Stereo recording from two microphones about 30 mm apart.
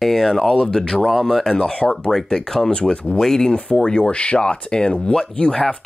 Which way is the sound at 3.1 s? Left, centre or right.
Centre.